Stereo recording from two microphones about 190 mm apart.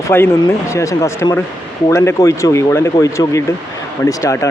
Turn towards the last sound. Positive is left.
turn(degrees=15)  # may be behind; listen again after turning